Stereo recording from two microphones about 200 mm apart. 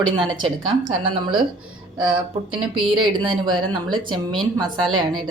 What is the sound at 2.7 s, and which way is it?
Speech, 25° right (ahead or behind).